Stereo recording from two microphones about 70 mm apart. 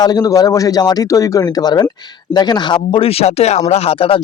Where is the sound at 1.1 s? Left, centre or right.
Left.